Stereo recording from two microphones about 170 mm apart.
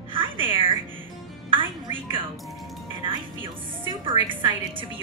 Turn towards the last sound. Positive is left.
turn(degrees=-30)  # may be behind; listen again after turning